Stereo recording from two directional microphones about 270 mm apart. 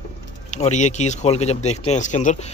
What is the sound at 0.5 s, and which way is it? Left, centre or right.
Speech, left.